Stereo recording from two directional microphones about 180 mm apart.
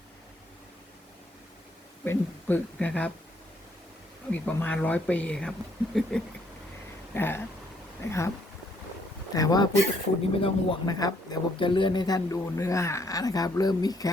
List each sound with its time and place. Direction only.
2.0 s speech: 10° left (ahead or behind)
4.3 s speech: 10° left (ahead or behind)
7.1 s speech: 10° left (ahead or behind)
9.3 s speech: 20° left (ahead or behind)